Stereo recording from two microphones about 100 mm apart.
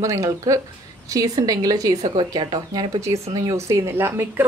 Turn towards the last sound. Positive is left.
turn(degrees=-25)  # may be behind; listen again after turning